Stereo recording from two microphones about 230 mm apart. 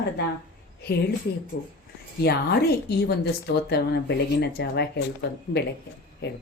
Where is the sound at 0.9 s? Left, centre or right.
Left.